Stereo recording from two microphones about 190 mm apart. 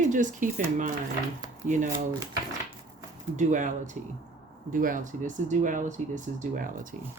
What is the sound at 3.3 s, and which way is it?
Speech, 40° right (ahead or behind).